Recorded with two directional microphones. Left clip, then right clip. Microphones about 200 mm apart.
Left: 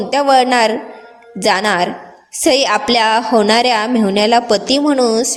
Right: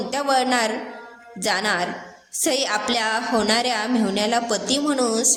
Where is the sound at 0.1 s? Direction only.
35° left (ahead or behind).